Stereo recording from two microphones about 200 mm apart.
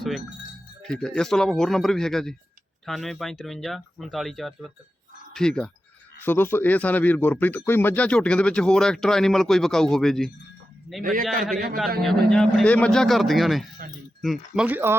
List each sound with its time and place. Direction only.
0.8 s speech: 5° left (ahead or behind)
11.0 s a man's voice: 45° right (ahead or behind)
12.3 s speech: 5° left (ahead or behind)